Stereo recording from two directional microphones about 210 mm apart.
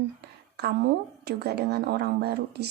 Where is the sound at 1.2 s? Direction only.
50° right (ahead or behind).